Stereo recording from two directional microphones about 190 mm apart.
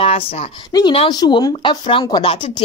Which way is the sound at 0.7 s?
25° left (ahead or behind).